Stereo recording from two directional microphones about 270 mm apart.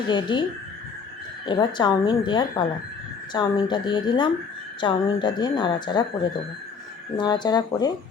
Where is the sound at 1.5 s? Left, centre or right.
Centre.